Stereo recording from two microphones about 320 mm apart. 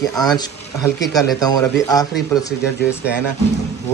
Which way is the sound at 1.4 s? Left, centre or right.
Centre.